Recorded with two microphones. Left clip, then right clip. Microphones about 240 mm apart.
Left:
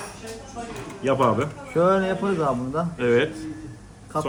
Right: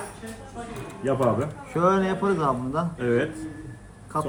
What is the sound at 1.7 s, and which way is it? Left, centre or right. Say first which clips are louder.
A man's voice: left 2 dB; centre.